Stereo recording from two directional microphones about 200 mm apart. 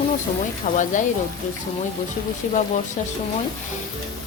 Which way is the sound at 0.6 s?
40° left (ahead or behind).